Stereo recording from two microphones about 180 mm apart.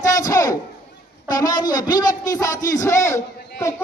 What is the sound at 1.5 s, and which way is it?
A man's voice, 25° left (ahead or behind).